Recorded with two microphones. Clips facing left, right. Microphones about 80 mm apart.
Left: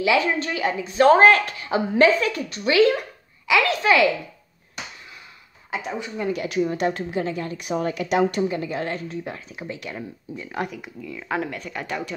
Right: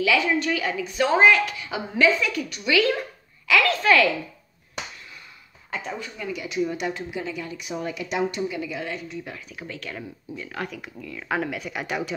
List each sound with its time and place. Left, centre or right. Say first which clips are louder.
0.0 s speech: left 1 dB; left
1.0 s a woman's voice: left 4 dB; left
3.4 s speech: left 1 dB; centre
5.9 s speech: left 3 dB; centre
6.2 s speech: left 3 dB; left
7.7 s speech: left 6 dB; left
8.4 s speech: left 4 dB; left
9.2 s speech: left 4 dB; left
10.7 s speech: left 2 dB; centre